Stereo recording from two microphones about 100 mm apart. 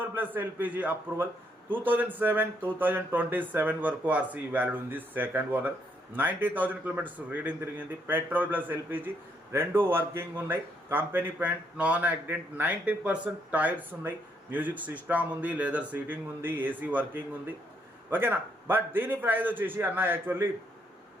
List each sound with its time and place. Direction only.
0.0 s a man's voice: 20° right (ahead or behind)